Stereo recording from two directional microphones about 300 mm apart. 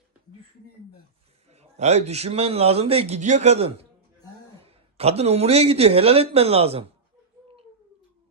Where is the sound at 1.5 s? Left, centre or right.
Right.